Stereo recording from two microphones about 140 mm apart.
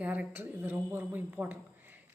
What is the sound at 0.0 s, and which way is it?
A woman's voice, 10° right (ahead or behind).